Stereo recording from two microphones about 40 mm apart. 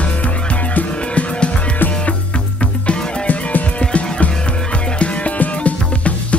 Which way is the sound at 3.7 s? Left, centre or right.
Left.